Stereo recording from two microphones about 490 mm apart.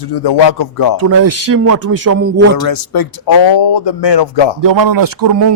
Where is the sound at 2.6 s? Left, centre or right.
Left.